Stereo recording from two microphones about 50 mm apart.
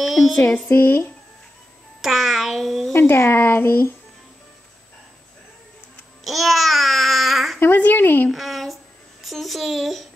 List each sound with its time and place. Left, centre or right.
0.0 s music: centre
0.7 s speech: left
2.0 s a sound: centre
2.9 s speech: left
6.2 s babbling: centre
7.7 s speech: left
8.3 s a sound: centre